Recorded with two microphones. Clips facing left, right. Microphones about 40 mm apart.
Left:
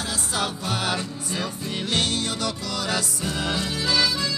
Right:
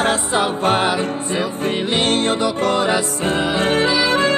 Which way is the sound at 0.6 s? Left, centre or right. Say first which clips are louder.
Right 11 dB; right.